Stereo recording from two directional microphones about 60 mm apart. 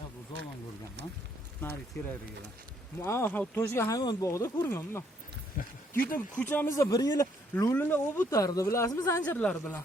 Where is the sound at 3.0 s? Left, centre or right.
Left.